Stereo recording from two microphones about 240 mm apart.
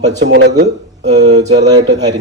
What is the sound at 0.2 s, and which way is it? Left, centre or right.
Speech, right.